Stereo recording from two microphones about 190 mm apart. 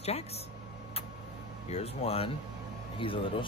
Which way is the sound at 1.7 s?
30° left (ahead or behind).